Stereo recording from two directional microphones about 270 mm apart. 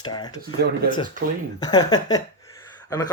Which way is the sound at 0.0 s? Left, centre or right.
Centre.